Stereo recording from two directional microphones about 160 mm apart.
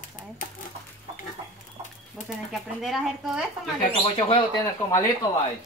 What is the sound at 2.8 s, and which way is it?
Speech, centre (ahead or behind).